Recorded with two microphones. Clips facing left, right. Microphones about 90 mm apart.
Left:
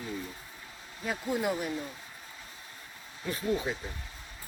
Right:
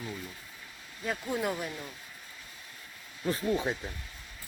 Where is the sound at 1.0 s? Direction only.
5° left (ahead or behind).